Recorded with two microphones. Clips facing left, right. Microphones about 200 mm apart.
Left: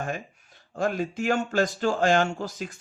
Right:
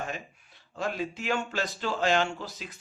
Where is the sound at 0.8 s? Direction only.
45° left (ahead or behind).